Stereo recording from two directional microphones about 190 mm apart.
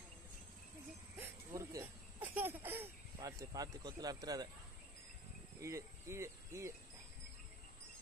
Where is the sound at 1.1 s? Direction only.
15° right (ahead or behind).